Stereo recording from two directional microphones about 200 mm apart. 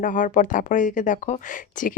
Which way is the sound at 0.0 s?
40° left (ahead or behind).